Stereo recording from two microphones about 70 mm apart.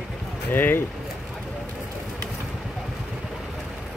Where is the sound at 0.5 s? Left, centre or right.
Left.